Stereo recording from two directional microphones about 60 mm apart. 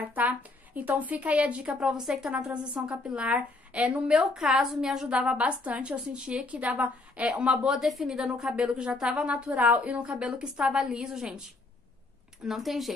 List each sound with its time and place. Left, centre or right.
0.1 s a woman's voice: right
1.7 s a woman's voice: centre
3.3 s a woman's voice: right
4.2 s a woman's voice: centre
5.1 s a woman's voice: centre
6.4 s a woman's voice: right; by 12.9 s centre